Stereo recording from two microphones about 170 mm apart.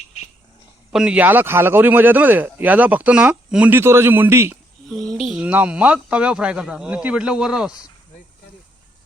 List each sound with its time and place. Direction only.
0.9 s speech: 5° right (ahead or behind)
4.9 s speech: 5° left (ahead or behind)